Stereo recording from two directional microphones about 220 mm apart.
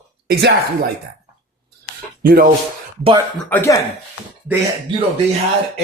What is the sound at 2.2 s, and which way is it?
Speech, 40° right (ahead or behind).